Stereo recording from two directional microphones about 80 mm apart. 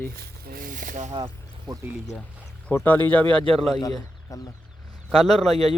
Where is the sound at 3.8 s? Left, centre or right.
Left.